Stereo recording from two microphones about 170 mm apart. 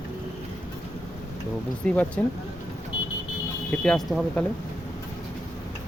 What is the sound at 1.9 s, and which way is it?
Speech, 5° left (ahead or behind).